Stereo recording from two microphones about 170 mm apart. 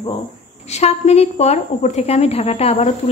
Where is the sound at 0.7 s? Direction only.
40° left (ahead or behind).